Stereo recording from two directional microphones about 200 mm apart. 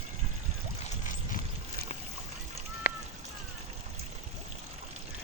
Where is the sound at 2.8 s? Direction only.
50° left (ahead or behind).